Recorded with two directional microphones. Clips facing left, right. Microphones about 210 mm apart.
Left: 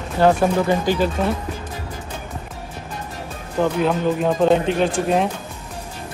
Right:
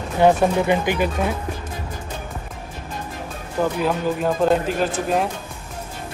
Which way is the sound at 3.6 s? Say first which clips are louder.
Left 2 dB; 5° right (ahead or behind).